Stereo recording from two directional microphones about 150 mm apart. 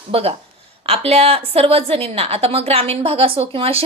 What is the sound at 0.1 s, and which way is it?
A woman's voice, 40° right (ahead or behind).